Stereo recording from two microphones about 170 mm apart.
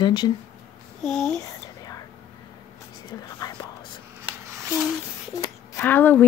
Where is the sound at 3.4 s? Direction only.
25° left (ahead or behind).